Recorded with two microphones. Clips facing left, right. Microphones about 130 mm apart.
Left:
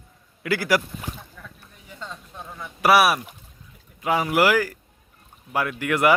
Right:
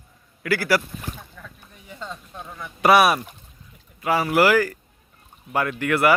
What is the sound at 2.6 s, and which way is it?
Speech, 5° left (ahead or behind).